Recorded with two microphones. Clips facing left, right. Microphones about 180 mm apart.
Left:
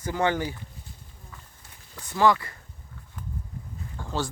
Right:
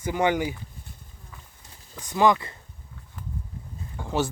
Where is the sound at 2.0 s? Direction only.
15° right (ahead or behind).